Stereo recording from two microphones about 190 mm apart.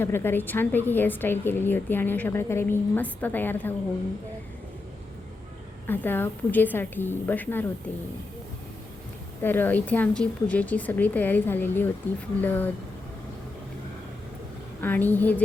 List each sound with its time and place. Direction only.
0.0 s a woman's voice: 10° left (ahead or behind)
5.9 s a woman's voice: 10° left (ahead or behind)
9.4 s a woman's voice: 10° left (ahead or behind)
14.8 s a woman's voice: 10° left (ahead or behind)